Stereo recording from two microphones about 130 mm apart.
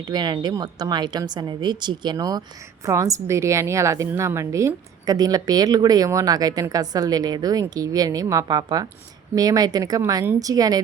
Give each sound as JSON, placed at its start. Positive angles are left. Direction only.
{"t": 0.1, "sound": "a woman's voice", "side_deg": -30}